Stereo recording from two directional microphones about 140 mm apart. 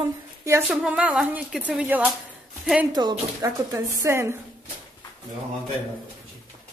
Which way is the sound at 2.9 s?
30° right (ahead or behind).